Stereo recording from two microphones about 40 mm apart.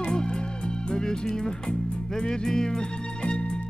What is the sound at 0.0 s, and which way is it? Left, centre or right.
Music, centre.